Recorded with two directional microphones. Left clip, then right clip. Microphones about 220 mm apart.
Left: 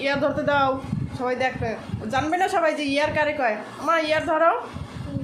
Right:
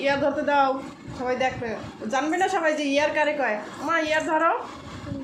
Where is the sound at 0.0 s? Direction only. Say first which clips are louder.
Even; 15° left (ahead or behind).